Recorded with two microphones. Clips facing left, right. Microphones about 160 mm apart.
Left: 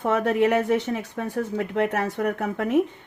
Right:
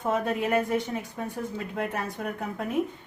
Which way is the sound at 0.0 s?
75° left (ahead or behind).